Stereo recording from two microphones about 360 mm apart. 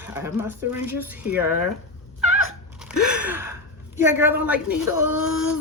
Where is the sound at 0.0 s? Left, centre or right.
Centre.